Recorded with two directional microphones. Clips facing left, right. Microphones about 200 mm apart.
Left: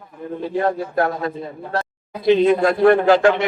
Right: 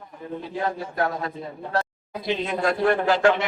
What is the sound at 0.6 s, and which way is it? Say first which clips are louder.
Speech: left 6 dB; 55° left (ahead or behind).